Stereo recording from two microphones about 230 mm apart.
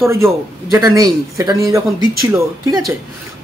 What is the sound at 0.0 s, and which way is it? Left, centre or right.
A man's voice, centre.